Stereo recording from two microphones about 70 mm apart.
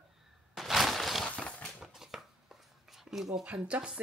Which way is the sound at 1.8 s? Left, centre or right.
Centre.